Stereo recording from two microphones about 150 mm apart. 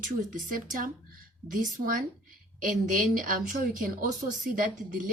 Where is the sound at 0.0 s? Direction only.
60° right (ahead or behind).